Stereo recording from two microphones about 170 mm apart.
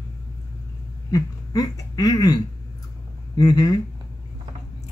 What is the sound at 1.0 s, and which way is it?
Speech, 20° left (ahead or behind).